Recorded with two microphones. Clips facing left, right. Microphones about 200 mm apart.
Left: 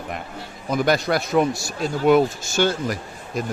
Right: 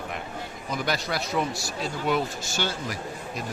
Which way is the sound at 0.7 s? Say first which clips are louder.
Left 9 dB; 50° left (ahead or behind).